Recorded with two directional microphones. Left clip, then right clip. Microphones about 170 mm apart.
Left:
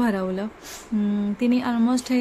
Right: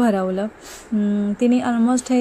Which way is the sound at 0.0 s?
5° right (ahead or behind).